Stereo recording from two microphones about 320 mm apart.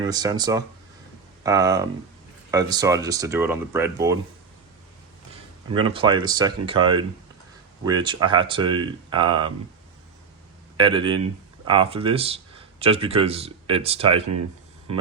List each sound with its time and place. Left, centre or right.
0.0 s speech: centre
5.7 s speech: centre
10.8 s speech: centre